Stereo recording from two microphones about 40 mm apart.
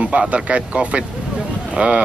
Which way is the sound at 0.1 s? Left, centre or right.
Right.